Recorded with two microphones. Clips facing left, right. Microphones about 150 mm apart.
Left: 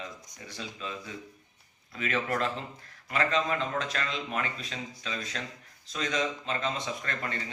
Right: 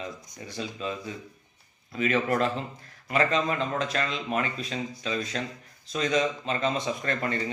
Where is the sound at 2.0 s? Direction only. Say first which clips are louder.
Right 5 dB; 20° right (ahead or behind).